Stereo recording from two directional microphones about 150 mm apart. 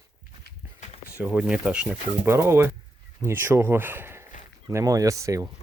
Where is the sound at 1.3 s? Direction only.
5° right (ahead or behind).